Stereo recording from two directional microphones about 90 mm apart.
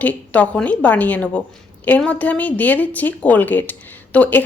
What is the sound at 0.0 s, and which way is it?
Speech, 15° left (ahead or behind).